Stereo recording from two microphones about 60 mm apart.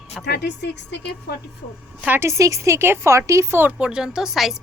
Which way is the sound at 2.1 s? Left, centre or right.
Right.